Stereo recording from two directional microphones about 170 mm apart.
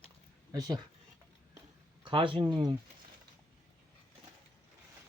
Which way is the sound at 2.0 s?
30° right (ahead or behind).